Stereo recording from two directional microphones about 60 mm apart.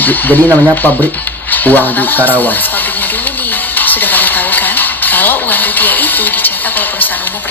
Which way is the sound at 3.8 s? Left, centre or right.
Left.